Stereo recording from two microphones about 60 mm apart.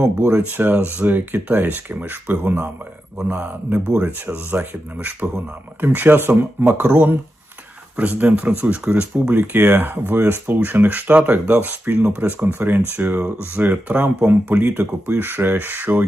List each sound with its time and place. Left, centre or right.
0.3 s speech: right
9.5 s speech: right
14.8 s speech: right